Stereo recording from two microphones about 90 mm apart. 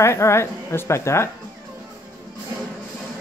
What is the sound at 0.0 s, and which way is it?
A woman's voice, 30° left (ahead or behind).